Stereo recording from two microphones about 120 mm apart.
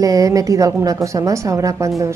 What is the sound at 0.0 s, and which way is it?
A woman's voice, 30° right (ahead or behind).